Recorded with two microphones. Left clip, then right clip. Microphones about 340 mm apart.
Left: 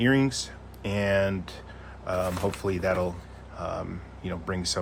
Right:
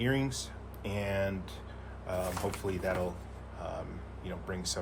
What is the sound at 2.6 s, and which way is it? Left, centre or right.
Speech, left.